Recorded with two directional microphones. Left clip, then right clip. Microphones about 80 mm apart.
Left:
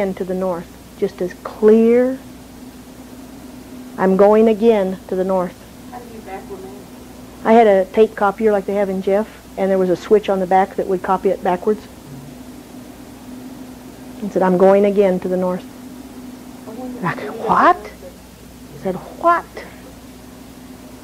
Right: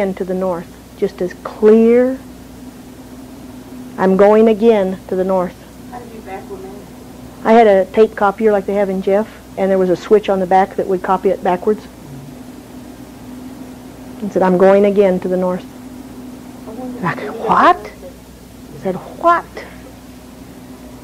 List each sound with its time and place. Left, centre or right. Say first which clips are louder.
0.0 s a woman's voice: right 2 dB; left
3.9 s a woman's voice: right 2 dB; left
5.9 s a sound: right 2 dB; left
7.4 s a woman's voice: right 2 dB; left
14.3 s a woman's voice: right 2 dB; left
17.0 s a woman's voice: right 2 dB; left